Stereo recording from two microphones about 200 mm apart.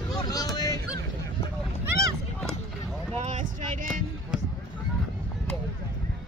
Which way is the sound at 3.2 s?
35° right (ahead or behind).